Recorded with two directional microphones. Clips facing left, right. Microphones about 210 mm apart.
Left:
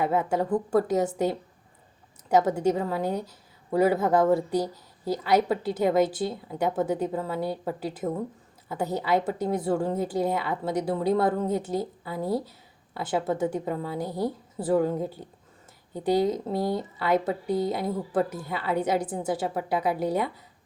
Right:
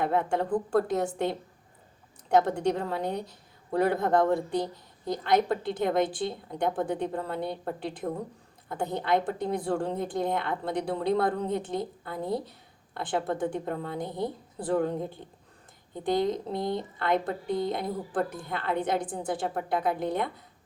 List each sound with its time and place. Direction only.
0.0 s speech: 5° left (ahead or behind)